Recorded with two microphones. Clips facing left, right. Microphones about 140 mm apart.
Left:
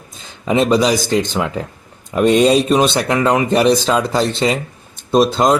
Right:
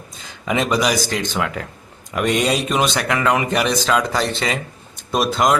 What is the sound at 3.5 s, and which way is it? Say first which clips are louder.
Speech: left 7 dB; 35° left (ahead or behind).